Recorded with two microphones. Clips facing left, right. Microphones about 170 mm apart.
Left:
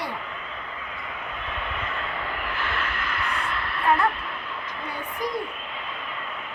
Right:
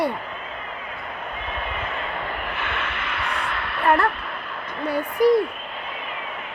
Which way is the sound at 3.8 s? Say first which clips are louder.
Right 3 dB; 70° right (ahead or behind).